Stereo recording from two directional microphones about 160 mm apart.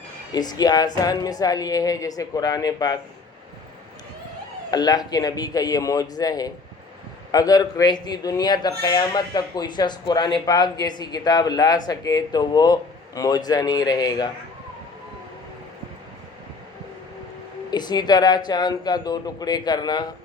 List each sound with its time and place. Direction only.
0.3 s speech: 25° left (ahead or behind)
4.7 s speech: 25° left (ahead or behind)
17.7 s speech: 25° left (ahead or behind)